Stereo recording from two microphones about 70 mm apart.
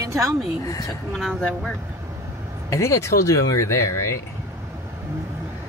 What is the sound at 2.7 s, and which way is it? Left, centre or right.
Speech, left.